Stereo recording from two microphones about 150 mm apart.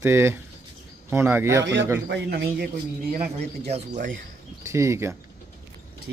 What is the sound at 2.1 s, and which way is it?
Speech, 90° right.